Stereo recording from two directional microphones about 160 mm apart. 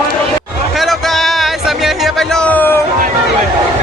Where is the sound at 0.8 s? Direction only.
Centre (ahead or behind).